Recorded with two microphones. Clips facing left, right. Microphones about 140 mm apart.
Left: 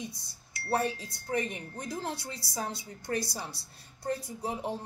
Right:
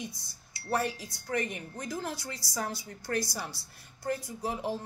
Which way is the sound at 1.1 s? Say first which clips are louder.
Even; 25° left (ahead or behind).